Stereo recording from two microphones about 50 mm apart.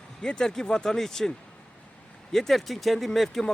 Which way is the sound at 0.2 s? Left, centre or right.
Centre.